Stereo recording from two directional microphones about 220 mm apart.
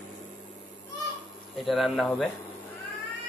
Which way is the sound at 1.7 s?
Centre (ahead or behind).